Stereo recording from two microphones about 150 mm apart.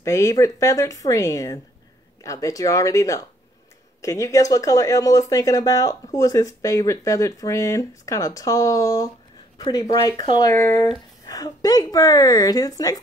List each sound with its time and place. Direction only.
0.0 s speech: 20° left (ahead or behind)
10.5 s speech: 15° left (ahead or behind)
11.2 s speech: 25° left (ahead or behind)